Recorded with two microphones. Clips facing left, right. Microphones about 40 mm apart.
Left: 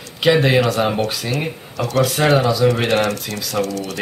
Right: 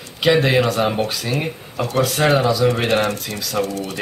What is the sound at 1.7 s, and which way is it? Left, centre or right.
Speech, right.